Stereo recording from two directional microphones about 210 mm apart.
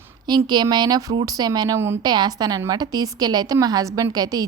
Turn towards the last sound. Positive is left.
turn(degrees=-20)  # may be behind; listen again after turning